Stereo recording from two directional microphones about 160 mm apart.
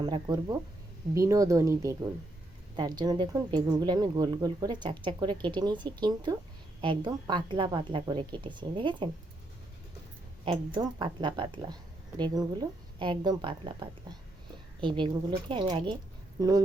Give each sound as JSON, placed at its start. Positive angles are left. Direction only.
{"t": 0.0, "sound": "speech", "side_deg": -25}
{"t": 10.4, "sound": "a woman's voice", "side_deg": -30}